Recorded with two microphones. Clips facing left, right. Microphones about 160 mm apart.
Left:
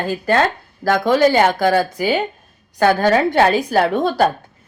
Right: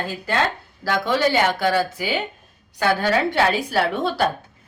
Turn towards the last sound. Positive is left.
turn(degrees=45)  # may be behind; listen again after turning